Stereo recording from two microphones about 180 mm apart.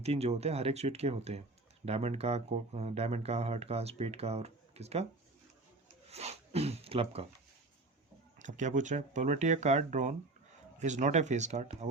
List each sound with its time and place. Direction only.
0.0 s speech: 35° right (ahead or behind)
6.1 s speech: 35° right (ahead or behind)
8.4 s speech: 45° right (ahead or behind)